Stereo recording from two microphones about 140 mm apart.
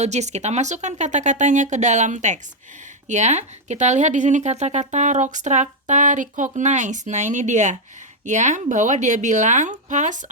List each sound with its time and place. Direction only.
0.0 s speech: 55° right (ahead or behind)